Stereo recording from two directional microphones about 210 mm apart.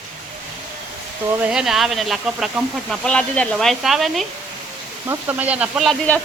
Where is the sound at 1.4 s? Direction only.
5° right (ahead or behind).